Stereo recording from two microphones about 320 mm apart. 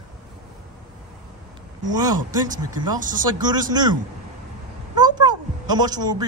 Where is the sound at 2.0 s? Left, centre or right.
Centre.